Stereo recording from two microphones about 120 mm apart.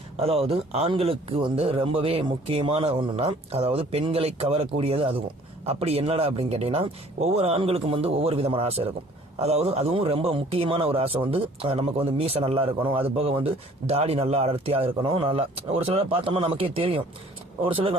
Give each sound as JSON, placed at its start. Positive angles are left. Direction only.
{"t": 0.2, "sound": "a man's voice", "side_deg": -55}